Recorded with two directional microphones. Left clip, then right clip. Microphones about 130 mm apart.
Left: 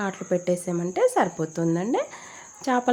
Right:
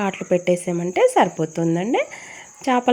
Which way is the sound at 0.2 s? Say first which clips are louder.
Right 6 dB; 25° right (ahead or behind).